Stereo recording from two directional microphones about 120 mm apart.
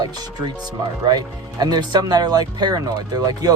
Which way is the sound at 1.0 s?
35° right (ahead or behind).